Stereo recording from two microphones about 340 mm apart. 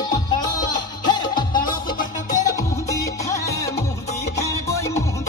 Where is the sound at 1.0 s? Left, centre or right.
Centre.